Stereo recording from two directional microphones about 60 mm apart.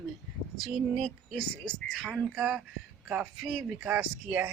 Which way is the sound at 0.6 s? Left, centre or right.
Centre.